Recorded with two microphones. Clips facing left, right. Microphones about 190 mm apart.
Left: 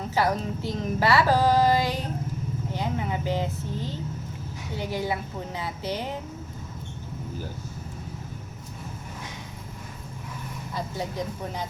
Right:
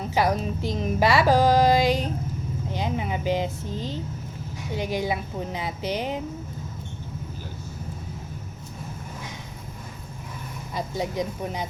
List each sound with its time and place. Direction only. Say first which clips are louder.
0.1 s a woman's voice: right 2 dB; 15° right (ahead or behind)
10.8 s a woman's voice: right 4 dB; 15° right (ahead or behind)